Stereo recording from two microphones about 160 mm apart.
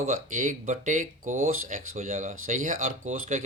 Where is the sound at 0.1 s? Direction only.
55° right (ahead or behind).